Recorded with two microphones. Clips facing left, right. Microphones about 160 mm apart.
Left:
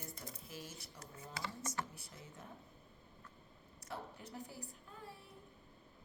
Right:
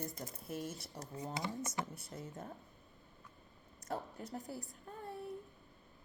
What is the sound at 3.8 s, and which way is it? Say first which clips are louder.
Speech: right 6 dB; 45° right (ahead or behind).